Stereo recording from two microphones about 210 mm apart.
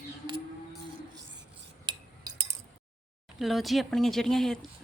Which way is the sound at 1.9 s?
20° right (ahead or behind).